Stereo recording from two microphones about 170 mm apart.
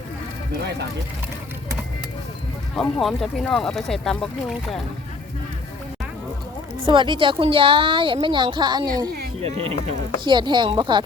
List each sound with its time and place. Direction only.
3.0 s speech: centre (ahead or behind)
6.8 s a woman's voice: 30° right (ahead or behind)
9.4 s a woman's voice: 35° right (ahead or behind)